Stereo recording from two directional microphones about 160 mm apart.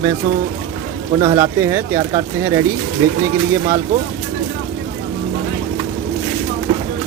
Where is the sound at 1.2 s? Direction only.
20° right (ahead or behind).